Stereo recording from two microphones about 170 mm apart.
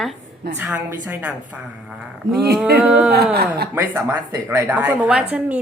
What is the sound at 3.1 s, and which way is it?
Speech, 70° right (ahead or behind).